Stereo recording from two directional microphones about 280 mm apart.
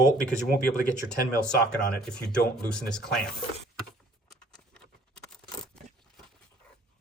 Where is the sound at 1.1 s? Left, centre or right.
Centre.